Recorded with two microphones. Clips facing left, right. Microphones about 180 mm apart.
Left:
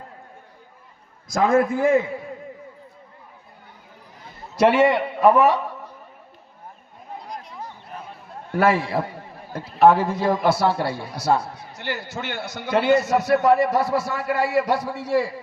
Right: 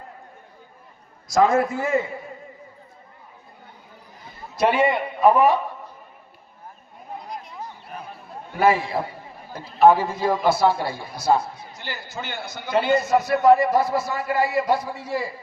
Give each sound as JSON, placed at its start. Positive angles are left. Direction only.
{"t": 1.3, "sound": "a man's voice", "side_deg": 55}
{"t": 4.5, "sound": "a man's voice", "side_deg": 75}
{"t": 8.5, "sound": "a man's voice", "side_deg": 70}